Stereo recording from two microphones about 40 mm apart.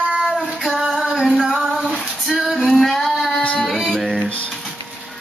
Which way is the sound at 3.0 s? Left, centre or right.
Centre.